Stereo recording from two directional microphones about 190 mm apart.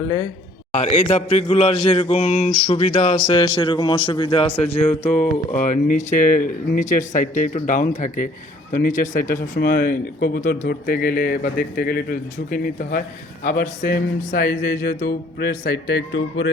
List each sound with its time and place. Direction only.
0.7 s a man's voice: 35° left (ahead or behind)
3.2 s a man's voice: 25° left (ahead or behind); by 15.7 s 55° left (ahead or behind)
15.9 s speech: 65° left (ahead or behind)